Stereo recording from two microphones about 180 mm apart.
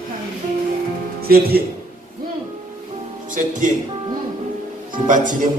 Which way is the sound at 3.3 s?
45° right (ahead or behind).